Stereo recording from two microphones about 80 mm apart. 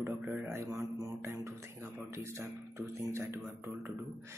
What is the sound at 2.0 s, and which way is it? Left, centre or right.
Speech, right.